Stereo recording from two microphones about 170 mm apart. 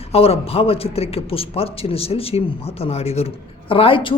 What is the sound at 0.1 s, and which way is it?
Speech, 35° left (ahead or behind).